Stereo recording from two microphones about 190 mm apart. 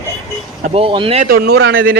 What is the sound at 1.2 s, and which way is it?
Speech, 55° right (ahead or behind).